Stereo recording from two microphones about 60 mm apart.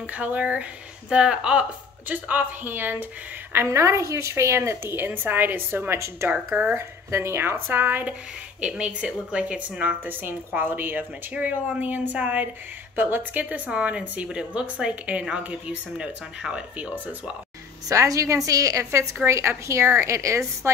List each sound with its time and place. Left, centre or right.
0.0 s a woman's voice: right
2.0 s speech: right
3.6 s a woman's voice: right
6.7 s speech: right
8.5 s speech: centre
10.0 s a woman's voice: right
17.8 s a woman's voice: right